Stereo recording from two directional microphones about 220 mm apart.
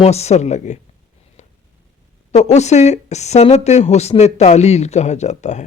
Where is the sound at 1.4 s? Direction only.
35° left (ahead or behind).